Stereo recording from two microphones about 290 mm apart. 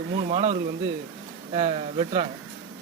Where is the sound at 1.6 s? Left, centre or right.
Centre.